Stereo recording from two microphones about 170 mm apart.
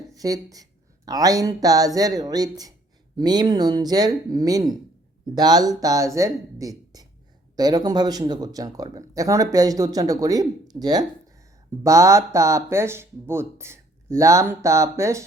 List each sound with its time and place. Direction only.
0.1 s speech: 20° right (ahead or behind)